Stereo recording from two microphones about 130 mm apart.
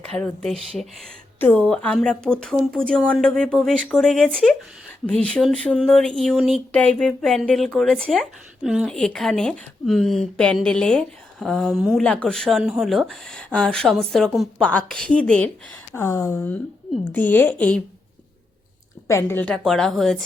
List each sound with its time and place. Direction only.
0.1 s speech: 5° left (ahead or behind)
8.9 s speech: 5° left (ahead or behind)
12.0 s speech: 10° left (ahead or behind)
16.0 s a woman's voice: 20° left (ahead or behind)
19.0 s a woman's voice: 20° left (ahead or behind)
19.6 s speech: centre (ahead or behind)